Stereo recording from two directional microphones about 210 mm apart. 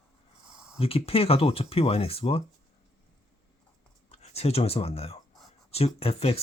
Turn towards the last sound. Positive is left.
turn(degrees=30)  # may be behind; listen again after turning